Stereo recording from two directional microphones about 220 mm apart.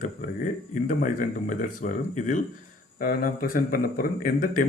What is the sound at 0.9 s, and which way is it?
Speech, 35° left (ahead or behind).